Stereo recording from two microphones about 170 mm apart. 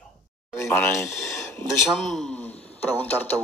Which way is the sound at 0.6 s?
15° left (ahead or behind).